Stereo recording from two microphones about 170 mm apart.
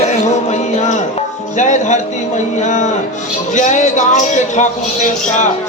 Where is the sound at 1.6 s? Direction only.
45° left (ahead or behind).